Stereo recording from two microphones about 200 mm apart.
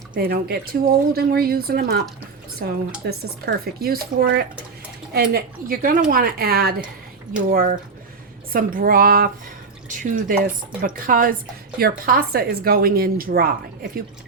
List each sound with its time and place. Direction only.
0.1 s speech: 50° right (ahead or behind)